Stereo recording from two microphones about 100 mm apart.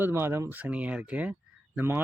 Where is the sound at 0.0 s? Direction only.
25° right (ahead or behind).